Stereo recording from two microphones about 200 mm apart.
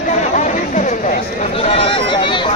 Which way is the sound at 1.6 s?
30° left (ahead or behind).